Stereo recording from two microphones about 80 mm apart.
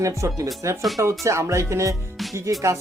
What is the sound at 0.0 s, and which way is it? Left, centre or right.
Speech, right.